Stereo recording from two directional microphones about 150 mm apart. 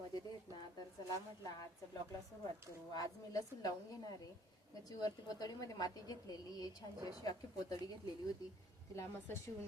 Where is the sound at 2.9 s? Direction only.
25° left (ahead or behind).